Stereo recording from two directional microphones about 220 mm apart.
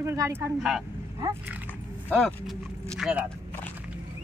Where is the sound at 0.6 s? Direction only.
Centre (ahead or behind).